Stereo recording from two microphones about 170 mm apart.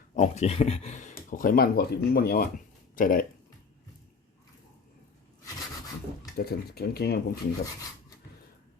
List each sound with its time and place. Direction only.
0.2 s speech: 40° left (ahead or behind)
1.1 s speech: 55° left (ahead or behind)
6.3 s speech: 65° left (ahead or behind)